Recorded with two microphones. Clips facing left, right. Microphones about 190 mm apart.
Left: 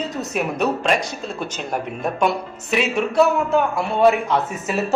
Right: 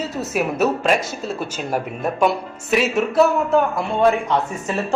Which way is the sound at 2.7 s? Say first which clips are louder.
Right 1 dB; centre (ahead or behind).